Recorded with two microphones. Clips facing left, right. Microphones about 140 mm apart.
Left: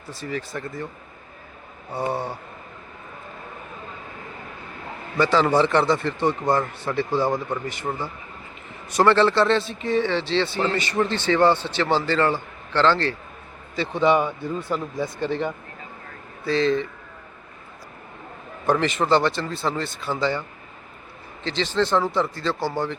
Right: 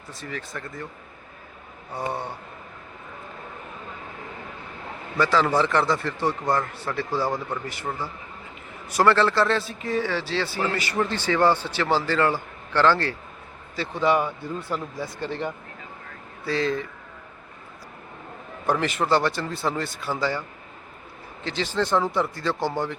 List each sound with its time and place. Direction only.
0.1 s speech: centre (ahead or behind)
2.0 s speech: centre (ahead or behind)
5.1 s speech: centre (ahead or behind)
7.2 s speech: 20° left (ahead or behind)
7.6 s speech: 5° right (ahead or behind)
8.9 s speech: 5° right (ahead or behind)
13.7 s speech: 20° left (ahead or behind)
16.5 s speech: 10° right (ahead or behind)
18.6 s speech: 10° right (ahead or behind)
21.4 s speech: 10° right (ahead or behind)